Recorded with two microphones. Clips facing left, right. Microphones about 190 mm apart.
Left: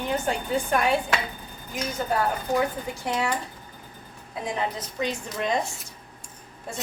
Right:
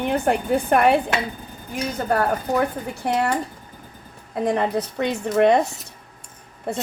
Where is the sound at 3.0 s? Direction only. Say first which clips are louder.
Right 6 dB; 55° right (ahead or behind).